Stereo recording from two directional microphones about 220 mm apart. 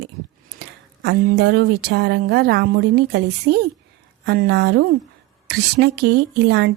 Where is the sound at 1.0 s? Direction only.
50° right (ahead or behind).